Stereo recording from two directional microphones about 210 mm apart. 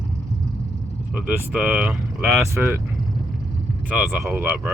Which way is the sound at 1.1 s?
5° right (ahead or behind).